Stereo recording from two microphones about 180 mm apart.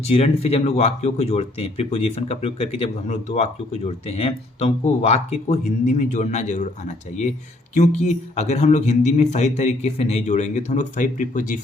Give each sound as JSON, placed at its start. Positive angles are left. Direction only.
{"t": 0.0, "sound": "speech", "side_deg": 35}